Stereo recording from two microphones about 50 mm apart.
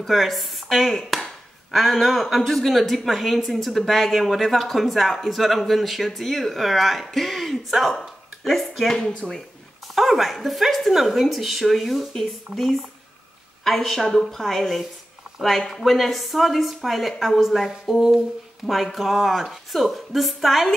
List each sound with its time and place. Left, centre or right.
0.0 s a woman's voice: centre
9.1 s speech: centre
9.9 s a woman's voice: centre